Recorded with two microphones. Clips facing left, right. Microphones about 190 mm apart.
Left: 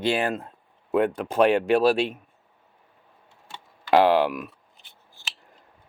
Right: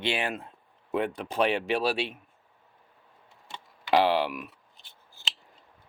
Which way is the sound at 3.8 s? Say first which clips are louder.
Left 5 dB; 50° left (ahead or behind).